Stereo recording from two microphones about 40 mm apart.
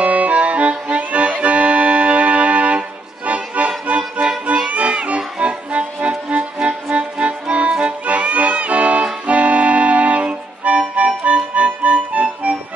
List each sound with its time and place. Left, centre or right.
0.0 s accordion: right
3.5 s music: right